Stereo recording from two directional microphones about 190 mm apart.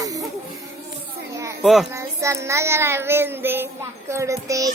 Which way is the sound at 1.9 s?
15° right (ahead or behind).